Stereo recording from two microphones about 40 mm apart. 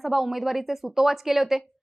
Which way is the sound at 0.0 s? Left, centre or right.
Centre.